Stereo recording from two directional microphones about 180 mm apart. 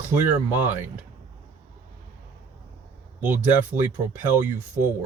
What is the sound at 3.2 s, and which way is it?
Speech, 10° right (ahead or behind).